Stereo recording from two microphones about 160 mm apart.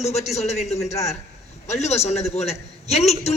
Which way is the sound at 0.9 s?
20° left (ahead or behind).